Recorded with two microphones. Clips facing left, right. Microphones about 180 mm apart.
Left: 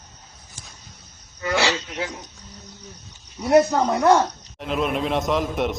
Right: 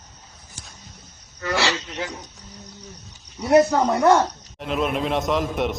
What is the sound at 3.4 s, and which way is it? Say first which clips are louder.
Speech: even; centre (ahead or behind).